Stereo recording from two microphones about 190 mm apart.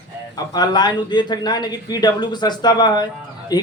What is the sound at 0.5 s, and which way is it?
Speech, 20° left (ahead or behind).